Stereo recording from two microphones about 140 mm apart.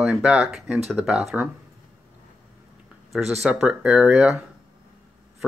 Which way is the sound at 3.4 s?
5° right (ahead or behind).